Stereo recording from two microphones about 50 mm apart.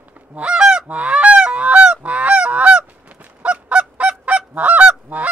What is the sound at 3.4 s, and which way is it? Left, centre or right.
Honk, right.